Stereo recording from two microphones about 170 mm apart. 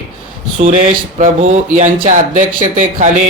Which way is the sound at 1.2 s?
45° right (ahead or behind).